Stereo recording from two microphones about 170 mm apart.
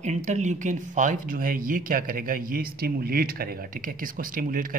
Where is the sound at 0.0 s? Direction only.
45° right (ahead or behind).